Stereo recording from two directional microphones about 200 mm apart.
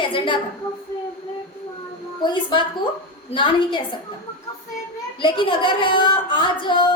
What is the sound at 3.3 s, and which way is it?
Speech, 25° left (ahead or behind).